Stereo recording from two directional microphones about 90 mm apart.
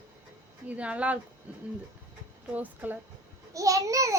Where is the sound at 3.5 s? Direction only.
40° right (ahead or behind).